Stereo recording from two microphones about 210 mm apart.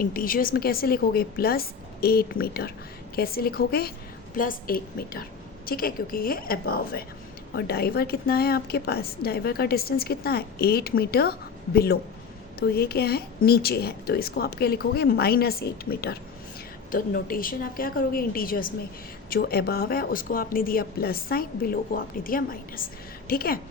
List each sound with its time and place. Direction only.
0.0 s a woman's voice: 45° left (ahead or behind)